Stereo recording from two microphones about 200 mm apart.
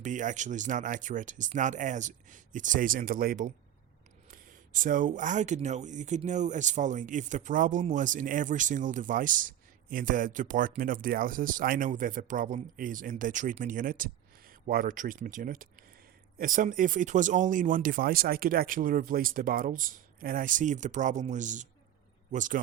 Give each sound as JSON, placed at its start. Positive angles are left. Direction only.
{"t": 0.0, "sound": "speech", "side_deg": -40}